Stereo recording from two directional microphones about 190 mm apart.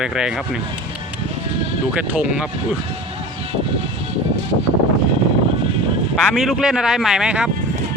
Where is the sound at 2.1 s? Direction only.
5° right (ahead or behind).